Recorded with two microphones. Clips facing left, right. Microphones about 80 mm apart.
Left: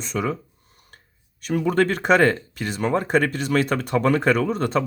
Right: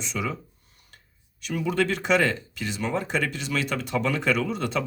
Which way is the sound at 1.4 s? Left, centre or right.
Left.